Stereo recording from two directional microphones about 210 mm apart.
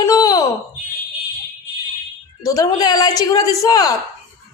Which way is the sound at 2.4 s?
15° left (ahead or behind).